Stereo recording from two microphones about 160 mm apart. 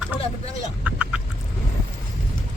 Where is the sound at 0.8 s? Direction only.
10° right (ahead or behind).